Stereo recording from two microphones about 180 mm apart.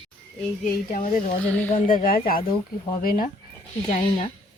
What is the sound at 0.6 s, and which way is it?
Speech, 45° left (ahead or behind).